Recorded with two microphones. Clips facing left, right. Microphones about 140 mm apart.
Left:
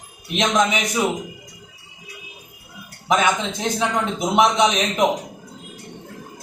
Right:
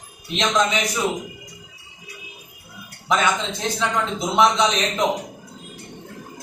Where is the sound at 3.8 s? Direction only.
20° left (ahead or behind).